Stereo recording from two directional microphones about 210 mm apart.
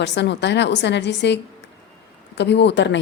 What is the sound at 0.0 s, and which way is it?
A woman's voice, 55° left (ahead or behind).